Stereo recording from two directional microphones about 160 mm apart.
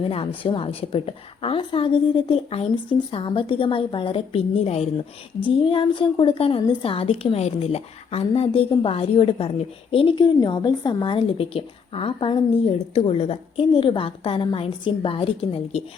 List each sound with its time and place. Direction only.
0.1 s a woman's voice: 35° left (ahead or behind)